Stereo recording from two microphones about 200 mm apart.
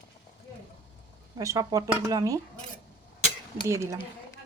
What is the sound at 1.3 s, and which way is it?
Speech, 15° right (ahead or behind).